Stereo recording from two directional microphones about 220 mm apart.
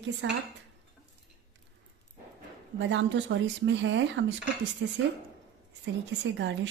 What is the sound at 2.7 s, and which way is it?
Speech, 55° right (ahead or behind).